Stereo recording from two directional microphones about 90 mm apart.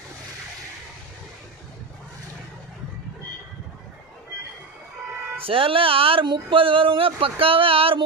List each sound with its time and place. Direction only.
5.4 s speech: 90° right